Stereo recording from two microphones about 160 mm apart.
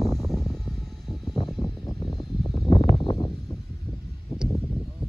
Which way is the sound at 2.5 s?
35° left (ahead or behind).